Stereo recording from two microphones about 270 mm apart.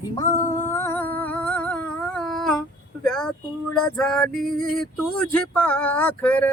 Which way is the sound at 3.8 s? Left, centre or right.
Centre.